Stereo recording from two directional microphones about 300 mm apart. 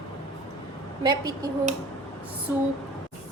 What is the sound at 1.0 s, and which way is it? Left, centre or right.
Speech, centre.